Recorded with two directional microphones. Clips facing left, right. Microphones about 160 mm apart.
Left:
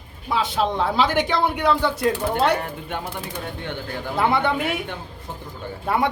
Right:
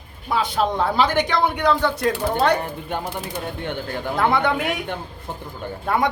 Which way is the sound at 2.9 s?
35° right (ahead or behind).